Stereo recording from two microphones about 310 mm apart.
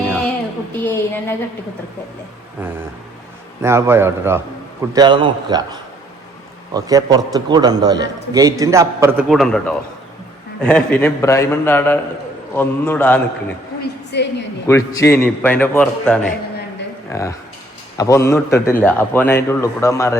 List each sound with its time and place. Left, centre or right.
0.7 s a man's voice: centre
3.6 s a man's voice: centre
6.7 s a man's voice: centre
13.8 s a sound: left
14.7 s a man's voice: centre